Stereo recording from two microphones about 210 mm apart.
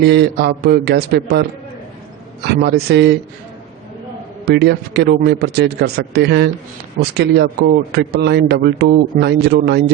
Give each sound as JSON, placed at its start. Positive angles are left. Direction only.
{"t": 0.0, "sound": "a man's voice", "side_deg": -50}
{"t": 4.4, "sound": "a man's voice", "side_deg": -50}